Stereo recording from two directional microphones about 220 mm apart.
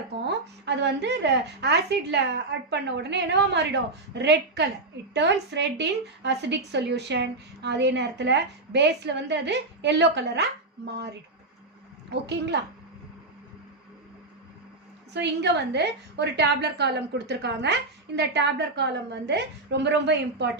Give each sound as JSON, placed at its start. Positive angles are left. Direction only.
{"t": 0.2, "sound": "a woman's voice", "side_deg": -50}
{"t": 12.1, "sound": "a woman's voice", "side_deg": -50}
{"t": 15.1, "sound": "a woman's voice", "side_deg": -50}